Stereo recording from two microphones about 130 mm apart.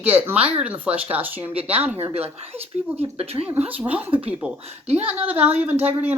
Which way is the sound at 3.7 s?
10° right (ahead or behind).